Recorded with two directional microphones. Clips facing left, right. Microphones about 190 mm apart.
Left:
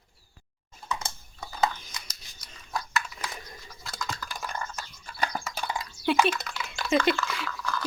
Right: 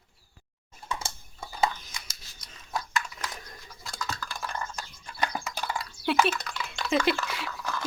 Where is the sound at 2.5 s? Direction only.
Centre (ahead or behind).